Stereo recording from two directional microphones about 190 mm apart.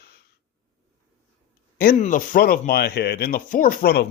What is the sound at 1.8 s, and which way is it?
A man's voice, 45° left (ahead or behind).